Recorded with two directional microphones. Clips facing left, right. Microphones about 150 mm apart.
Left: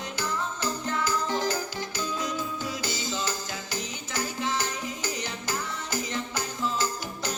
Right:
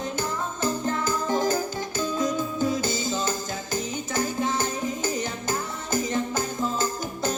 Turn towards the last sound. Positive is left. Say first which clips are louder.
# right 5 dB
turn(degrees=-50)  # may be behind; listen again after turning